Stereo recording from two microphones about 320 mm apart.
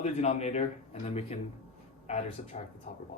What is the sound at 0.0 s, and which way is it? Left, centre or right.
Speech, left.